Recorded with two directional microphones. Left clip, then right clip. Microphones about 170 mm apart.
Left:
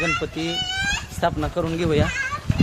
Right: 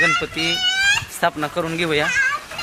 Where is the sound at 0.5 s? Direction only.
25° right (ahead or behind).